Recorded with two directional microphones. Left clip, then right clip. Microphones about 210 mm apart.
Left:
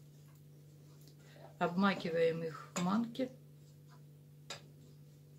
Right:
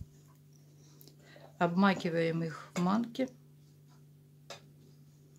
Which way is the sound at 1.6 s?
50° right (ahead or behind).